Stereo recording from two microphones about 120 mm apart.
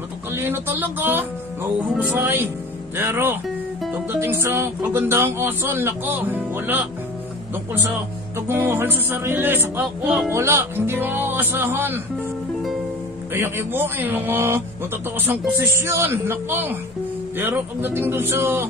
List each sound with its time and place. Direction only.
0.3 s music: 20° right (ahead or behind)
3.0 s a man's voice: 20° right (ahead or behind)
8.4 s music: 20° right (ahead or behind)
13.3 s a man's voice: 20° right (ahead or behind)